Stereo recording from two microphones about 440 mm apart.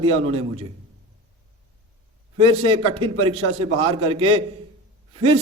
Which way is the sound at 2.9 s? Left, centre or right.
Centre.